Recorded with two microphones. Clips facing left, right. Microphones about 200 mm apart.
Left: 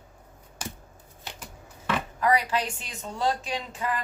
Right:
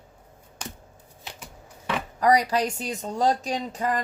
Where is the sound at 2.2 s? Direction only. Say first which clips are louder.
Right 5 dB; 40° right (ahead or behind).